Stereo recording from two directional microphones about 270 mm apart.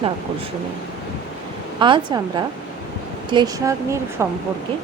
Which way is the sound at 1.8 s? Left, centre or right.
Centre.